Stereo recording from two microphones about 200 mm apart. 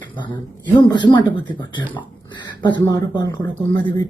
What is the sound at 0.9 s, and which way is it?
Speech, 20° left (ahead or behind).